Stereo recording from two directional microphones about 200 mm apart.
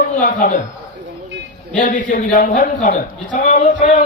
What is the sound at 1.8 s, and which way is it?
A man's voice, 40° left (ahead or behind).